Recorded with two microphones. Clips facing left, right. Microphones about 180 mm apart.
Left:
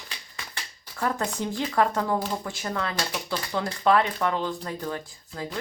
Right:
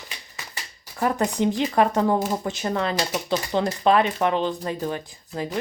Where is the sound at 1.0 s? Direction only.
15° right (ahead or behind).